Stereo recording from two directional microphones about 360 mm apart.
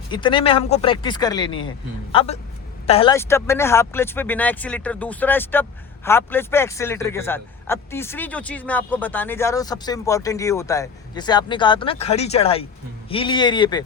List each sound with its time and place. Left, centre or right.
0.1 s speech: centre